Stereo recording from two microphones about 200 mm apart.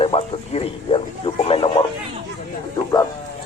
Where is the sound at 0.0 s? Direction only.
30° left (ahead or behind).